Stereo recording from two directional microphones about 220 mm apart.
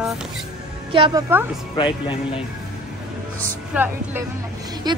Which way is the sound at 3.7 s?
10° right (ahead or behind).